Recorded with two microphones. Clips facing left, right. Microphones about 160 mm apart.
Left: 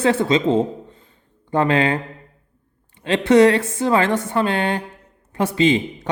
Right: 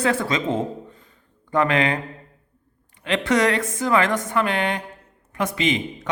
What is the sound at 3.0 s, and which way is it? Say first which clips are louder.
A woman's voice: left 7 dB; 30° left (ahead or behind).